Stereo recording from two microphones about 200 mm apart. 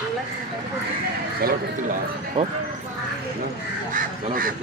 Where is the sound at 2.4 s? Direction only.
30° right (ahead or behind).